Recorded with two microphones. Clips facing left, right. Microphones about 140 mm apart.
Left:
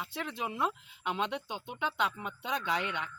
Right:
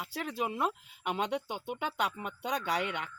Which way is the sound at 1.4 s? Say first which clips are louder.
Right 1 dB; 10° right (ahead or behind).